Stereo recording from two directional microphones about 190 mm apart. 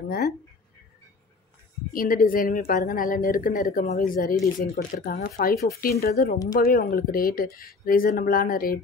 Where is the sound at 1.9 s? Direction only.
50° left (ahead or behind).